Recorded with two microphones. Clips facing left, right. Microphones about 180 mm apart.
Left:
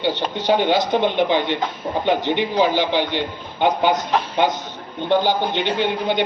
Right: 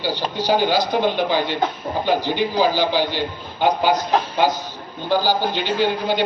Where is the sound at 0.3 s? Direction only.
25° left (ahead or behind).